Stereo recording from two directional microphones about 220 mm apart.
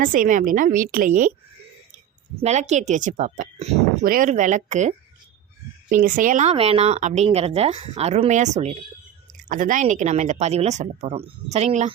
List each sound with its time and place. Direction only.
0.0 s speech: 40° right (ahead or behind)
2.3 s speech: 30° right (ahead or behind)